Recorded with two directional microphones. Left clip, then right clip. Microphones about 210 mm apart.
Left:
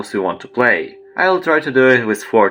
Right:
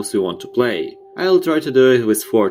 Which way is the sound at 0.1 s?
55° right (ahead or behind).